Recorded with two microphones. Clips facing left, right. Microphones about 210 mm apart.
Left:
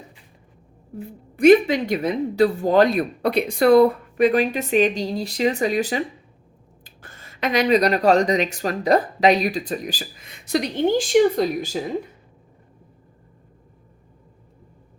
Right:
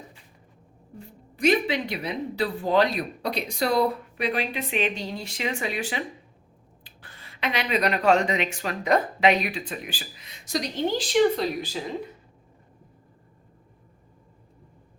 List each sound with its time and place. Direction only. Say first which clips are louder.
1.4 s speech: left 9 dB; 50° left (ahead or behind)